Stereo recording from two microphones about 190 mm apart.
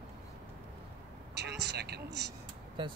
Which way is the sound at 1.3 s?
60° right (ahead or behind).